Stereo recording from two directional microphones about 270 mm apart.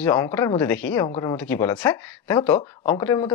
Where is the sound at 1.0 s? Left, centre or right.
Left.